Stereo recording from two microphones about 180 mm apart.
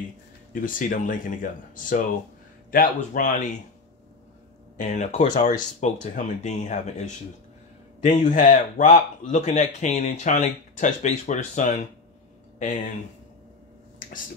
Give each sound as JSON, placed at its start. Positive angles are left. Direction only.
{"t": 0.5, "sound": "speech", "side_deg": 50}
{"t": 4.7, "sound": "speech", "side_deg": 45}